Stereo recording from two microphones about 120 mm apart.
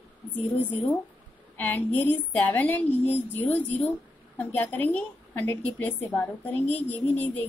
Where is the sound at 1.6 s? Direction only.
15° left (ahead or behind).